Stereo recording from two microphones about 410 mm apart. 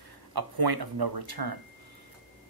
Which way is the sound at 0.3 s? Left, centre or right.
Right.